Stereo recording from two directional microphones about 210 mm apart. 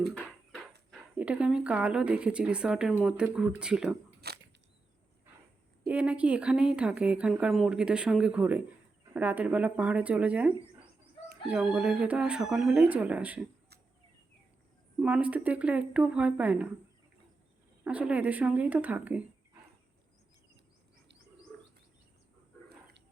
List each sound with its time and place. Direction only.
0.1 s a sound: centre (ahead or behind)
0.9 s speech: 5° right (ahead or behind)
4.2 s a sound: 50° right (ahead or behind)
5.9 s speech: 5° right (ahead or behind)
14.9 s speech: 5° right (ahead or behind)
17.8 s speech: 5° right (ahead or behind)